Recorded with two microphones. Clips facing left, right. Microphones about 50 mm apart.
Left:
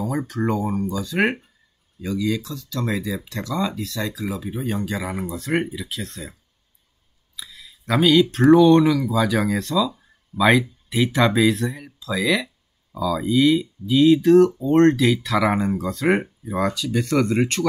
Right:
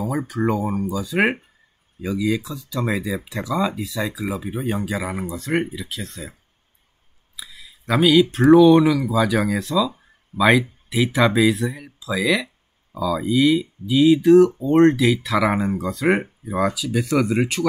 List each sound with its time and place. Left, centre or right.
0.0 s speech: centre
7.3 s speech: centre
10.3 s speech: right
10.9 s speech: centre